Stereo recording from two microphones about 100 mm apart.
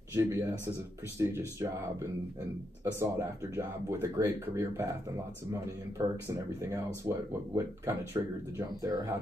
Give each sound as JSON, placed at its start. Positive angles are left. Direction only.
{"t": 0.1, "sound": "speech", "side_deg": -25}
{"t": 2.8, "sound": "speech", "side_deg": -30}